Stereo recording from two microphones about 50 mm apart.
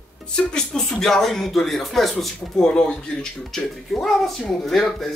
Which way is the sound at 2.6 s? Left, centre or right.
Centre.